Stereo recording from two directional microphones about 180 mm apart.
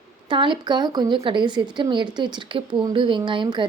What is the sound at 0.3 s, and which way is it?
A woman's voice, 25° right (ahead or behind).